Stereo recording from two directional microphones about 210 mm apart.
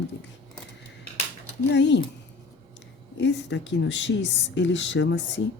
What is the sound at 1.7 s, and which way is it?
Speech, 55° left (ahead or behind).